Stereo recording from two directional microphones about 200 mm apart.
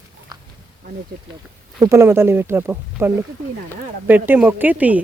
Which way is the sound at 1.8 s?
15° right (ahead or behind).